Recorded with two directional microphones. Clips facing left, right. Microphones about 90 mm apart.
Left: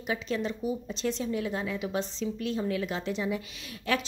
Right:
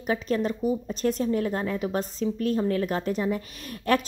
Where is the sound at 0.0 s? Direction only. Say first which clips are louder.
Right 5 dB; 45° right (ahead or behind).